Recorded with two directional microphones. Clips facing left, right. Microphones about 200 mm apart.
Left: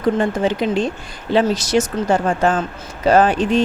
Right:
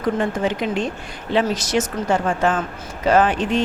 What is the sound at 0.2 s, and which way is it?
A woman's voice, 30° left (ahead or behind).